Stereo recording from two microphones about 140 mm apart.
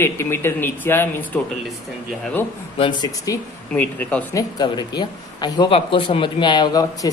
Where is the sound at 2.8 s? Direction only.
30° left (ahead or behind).